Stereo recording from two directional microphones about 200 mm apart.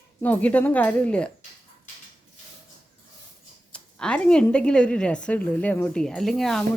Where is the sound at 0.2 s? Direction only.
10° left (ahead or behind).